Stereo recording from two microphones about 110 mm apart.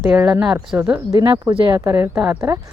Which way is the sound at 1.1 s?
40° right (ahead or behind).